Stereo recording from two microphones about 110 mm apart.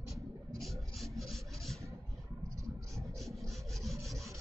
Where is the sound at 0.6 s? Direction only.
Centre (ahead or behind).